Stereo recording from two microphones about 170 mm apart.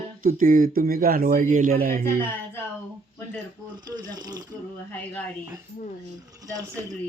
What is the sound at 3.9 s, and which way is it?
Speech, 25° right (ahead or behind).